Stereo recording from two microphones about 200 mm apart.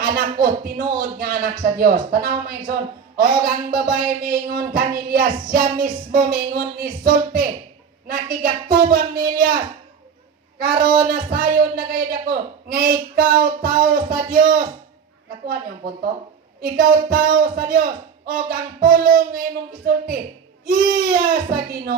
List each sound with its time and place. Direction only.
0.0 s speech: 45° right (ahead or behind)
11.0 s speech: 45° right (ahead or behind)